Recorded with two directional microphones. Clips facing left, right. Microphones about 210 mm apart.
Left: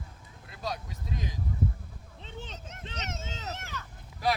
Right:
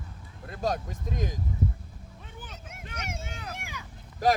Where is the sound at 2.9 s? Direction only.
10° right (ahead or behind).